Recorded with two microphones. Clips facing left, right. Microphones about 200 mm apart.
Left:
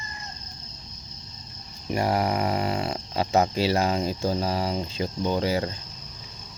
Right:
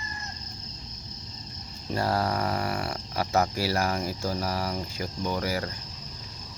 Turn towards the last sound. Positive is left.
turn(degrees=25)  # may be behind; listen again after turning